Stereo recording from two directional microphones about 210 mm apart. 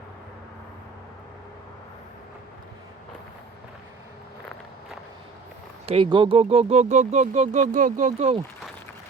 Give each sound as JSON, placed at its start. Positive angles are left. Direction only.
{"t": 5.8, "sound": "speech", "side_deg": -25}